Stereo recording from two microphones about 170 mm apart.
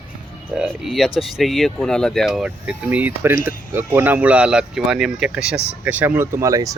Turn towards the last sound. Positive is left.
turn(degrees=-20)  # may be behind; listen again after turning